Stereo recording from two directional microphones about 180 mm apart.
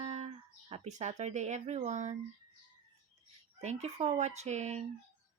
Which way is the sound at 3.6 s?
40° right (ahead or behind).